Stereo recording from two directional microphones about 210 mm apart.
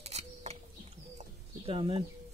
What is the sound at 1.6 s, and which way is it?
Speech, 25° right (ahead or behind).